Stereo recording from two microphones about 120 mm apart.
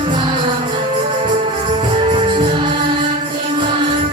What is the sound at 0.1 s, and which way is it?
Music, 40° right (ahead or behind).